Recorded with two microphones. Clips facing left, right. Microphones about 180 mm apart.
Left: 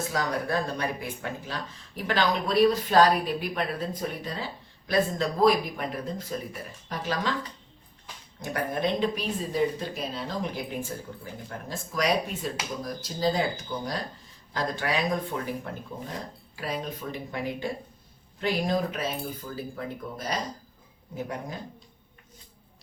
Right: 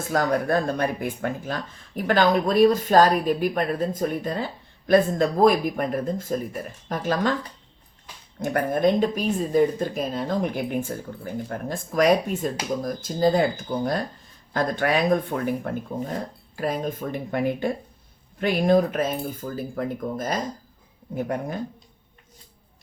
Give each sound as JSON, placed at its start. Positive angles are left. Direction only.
{"t": 0.1, "sound": "speech", "side_deg": -50}
{"t": 8.4, "sound": "speech", "side_deg": -50}